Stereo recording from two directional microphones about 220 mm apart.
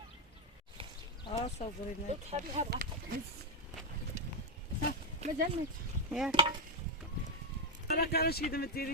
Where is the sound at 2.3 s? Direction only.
35° right (ahead or behind).